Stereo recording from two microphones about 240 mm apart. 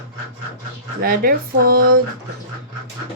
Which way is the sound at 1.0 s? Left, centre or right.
Right.